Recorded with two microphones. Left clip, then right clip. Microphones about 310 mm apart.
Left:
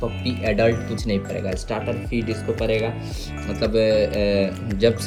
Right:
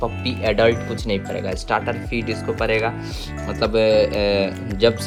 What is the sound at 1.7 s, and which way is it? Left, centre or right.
Speech, centre.